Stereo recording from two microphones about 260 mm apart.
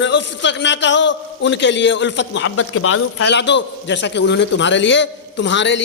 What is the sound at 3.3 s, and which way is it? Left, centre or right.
A man's voice, left.